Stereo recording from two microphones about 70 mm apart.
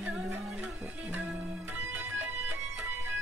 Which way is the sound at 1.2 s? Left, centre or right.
Right.